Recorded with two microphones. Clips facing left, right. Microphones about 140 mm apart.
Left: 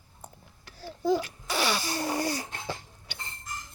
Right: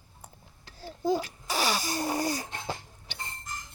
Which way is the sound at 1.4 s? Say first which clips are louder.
Even; 40° right (ahead or behind).